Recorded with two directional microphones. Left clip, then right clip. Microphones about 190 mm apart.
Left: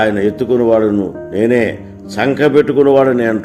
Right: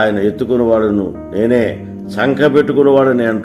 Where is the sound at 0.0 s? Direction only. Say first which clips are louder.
Even; 25° left (ahead or behind).